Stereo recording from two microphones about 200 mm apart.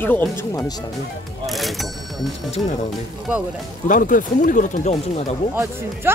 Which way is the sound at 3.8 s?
45° left (ahead or behind).